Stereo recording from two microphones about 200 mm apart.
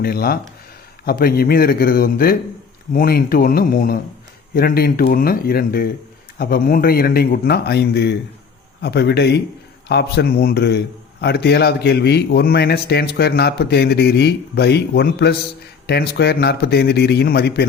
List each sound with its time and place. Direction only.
0.0 s a man's voice: 50° left (ahead or behind)